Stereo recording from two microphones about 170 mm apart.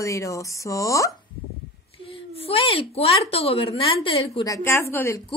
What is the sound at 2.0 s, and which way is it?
A woman's voice, 35° left (ahead or behind).